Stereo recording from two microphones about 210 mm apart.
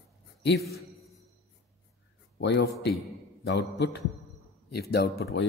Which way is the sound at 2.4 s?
55° left (ahead or behind).